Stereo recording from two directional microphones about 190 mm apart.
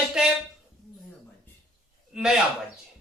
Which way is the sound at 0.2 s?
5° right (ahead or behind).